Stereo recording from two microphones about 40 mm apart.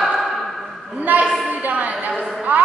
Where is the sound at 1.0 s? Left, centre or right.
Right.